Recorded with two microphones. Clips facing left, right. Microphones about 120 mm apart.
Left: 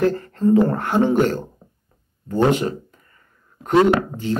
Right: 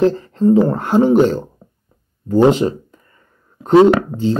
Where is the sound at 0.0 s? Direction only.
25° right (ahead or behind).